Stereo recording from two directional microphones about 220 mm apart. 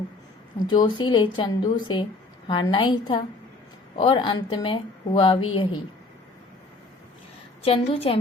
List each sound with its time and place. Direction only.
0.7 s a woman's voice: 20° left (ahead or behind)
7.6 s a woman's voice: 25° left (ahead or behind)